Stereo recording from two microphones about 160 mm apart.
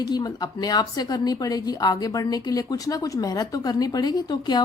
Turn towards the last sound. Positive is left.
turn(degrees=25)  # may be behind; listen again after turning